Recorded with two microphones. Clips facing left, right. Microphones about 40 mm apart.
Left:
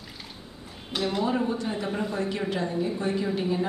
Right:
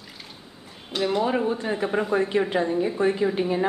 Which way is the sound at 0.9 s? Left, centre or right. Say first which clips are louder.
Right 4 dB; centre.